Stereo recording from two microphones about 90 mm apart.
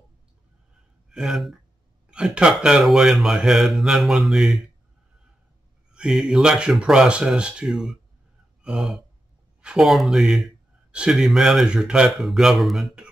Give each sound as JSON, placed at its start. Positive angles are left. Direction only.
{"t": 1.1, "sound": "speech", "side_deg": -5}
{"t": 5.9, "sound": "speech", "side_deg": -5}